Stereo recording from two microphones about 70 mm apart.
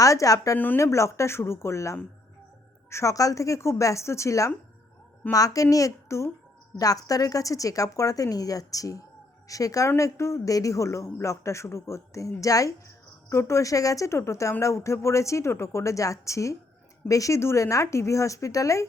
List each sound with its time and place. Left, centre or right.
0.0 s a man's voice: left
6.7 s a woman's voice: left
10.0 s a man's voice: left
13.3 s a man's voice: left